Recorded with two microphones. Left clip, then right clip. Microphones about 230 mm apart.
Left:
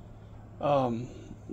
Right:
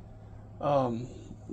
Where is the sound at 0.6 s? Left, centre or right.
Centre.